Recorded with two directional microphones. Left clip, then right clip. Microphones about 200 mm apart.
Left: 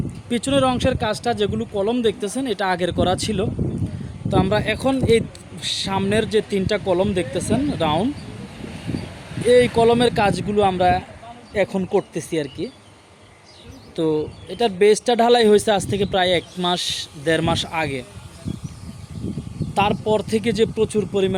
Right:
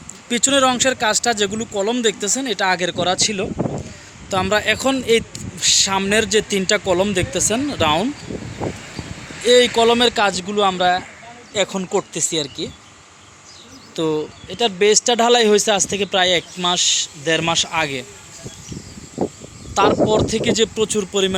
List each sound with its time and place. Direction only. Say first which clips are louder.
0.3 s a man's voice: right 3 dB; 5° left (ahead or behind)
4.3 s a man's voice: right 2 dB; centre (ahead or behind)
9.5 s speech: right 1 dB; 5° left (ahead or behind)
12.3 s speech: even; 10° left (ahead or behind)
13.9 s speech: even; 10° left (ahead or behind)
17.7 s speech: right 3 dB; 10° left (ahead or behind)
19.7 s speech: right 4 dB; 20° left (ahead or behind)